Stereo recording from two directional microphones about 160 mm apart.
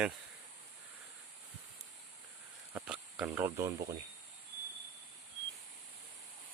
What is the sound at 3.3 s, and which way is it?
Speech, 15° right (ahead or behind).